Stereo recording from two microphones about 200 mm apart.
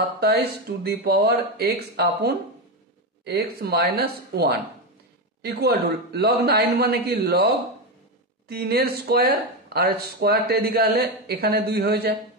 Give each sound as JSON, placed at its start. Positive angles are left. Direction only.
{"t": 0.8, "sound": "speech", "side_deg": -50}